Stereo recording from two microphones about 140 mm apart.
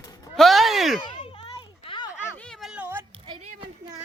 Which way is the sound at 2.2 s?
5° left (ahead or behind).